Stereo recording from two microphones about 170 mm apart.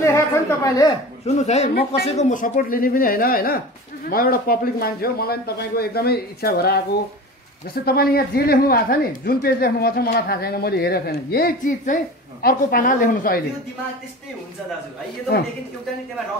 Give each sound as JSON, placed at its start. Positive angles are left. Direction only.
{"t": 0.0, "sound": "a woman's voice", "side_deg": 15}
{"t": 1.2, "sound": "speech", "side_deg": 40}